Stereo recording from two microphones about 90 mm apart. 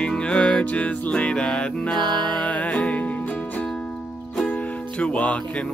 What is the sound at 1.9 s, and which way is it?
Music, 55° right (ahead or behind).